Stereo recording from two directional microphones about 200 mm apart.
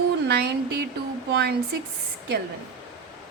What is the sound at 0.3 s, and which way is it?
A woman's voice, 55° right (ahead or behind).